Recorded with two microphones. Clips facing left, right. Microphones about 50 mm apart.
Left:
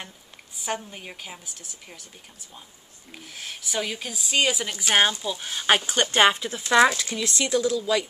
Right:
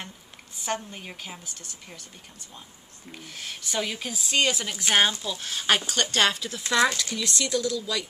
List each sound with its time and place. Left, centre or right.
0.6 s a woman's voice: centre
3.1 s a woman's voice: centre